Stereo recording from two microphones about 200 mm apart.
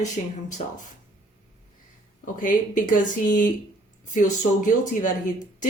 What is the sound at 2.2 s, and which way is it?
Speech, 40° left (ahead or behind).